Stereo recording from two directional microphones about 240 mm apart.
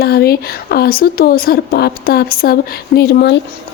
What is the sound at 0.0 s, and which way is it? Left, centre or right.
Speech, left.